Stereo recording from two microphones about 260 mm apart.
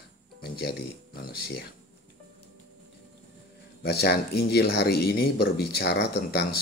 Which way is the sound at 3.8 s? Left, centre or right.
Left.